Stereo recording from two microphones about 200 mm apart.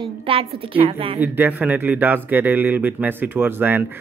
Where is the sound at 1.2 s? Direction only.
10° right (ahead or behind).